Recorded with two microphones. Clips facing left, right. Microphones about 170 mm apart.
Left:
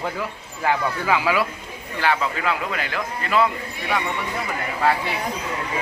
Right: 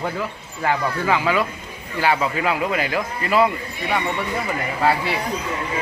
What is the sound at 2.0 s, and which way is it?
A man's voice, 10° right (ahead or behind).